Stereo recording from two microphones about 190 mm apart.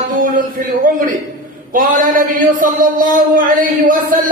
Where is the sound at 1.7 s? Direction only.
45° right (ahead or behind).